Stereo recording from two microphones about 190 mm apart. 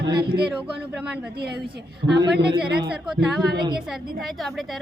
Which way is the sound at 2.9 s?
Centre (ahead or behind).